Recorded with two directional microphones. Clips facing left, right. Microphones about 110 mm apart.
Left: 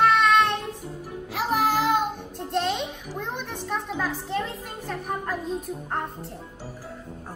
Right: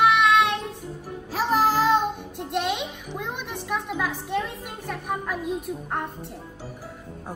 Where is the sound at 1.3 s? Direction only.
35° right (ahead or behind).